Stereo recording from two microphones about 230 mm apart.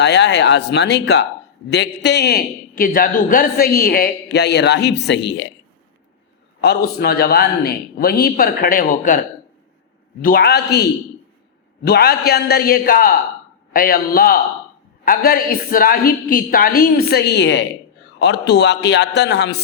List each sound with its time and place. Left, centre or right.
0.0 s a man's voice: left
6.6 s a man's voice: left
11.9 s a man's voice: left